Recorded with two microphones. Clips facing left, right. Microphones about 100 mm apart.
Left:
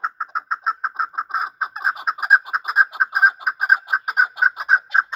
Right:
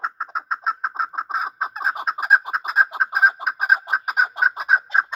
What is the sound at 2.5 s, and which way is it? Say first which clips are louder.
Chicken: left 1 dB; 5° left (ahead or behind).